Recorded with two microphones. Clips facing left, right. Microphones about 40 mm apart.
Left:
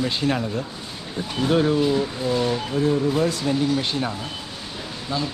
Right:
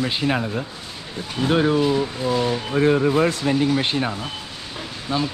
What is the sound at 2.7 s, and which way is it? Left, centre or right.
Speech, right.